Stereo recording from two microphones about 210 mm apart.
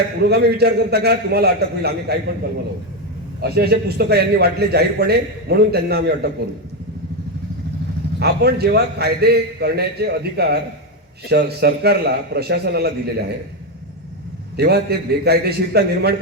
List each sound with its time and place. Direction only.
0.2 s a man's voice: 50° right (ahead or behind)
3.4 s a man's voice: 50° right (ahead or behind)
8.2 s a man's voice: 50° right (ahead or behind)
14.5 s a man's voice: 50° right (ahead or behind)